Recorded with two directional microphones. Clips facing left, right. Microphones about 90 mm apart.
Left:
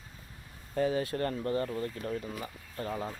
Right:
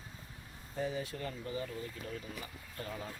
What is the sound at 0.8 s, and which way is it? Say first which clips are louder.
Speech: left 8 dB; 70° left (ahead or behind).